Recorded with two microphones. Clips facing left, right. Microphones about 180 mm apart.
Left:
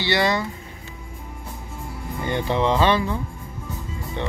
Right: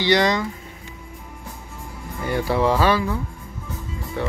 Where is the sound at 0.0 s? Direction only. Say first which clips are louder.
Right 3 dB; 15° right (ahead or behind).